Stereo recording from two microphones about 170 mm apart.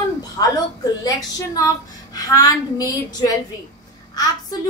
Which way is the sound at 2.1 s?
20° left (ahead or behind).